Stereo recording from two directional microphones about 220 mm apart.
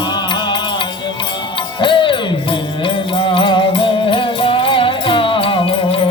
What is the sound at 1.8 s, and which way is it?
Music, 20° left (ahead or behind).